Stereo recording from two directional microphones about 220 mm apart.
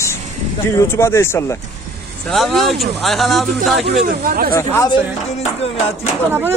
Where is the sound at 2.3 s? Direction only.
Centre (ahead or behind).